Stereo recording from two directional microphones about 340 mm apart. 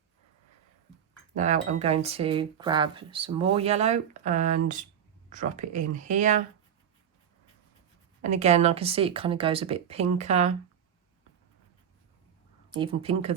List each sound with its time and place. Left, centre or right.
1.4 s speech: centre
8.2 s speech: centre
12.7 s speech: centre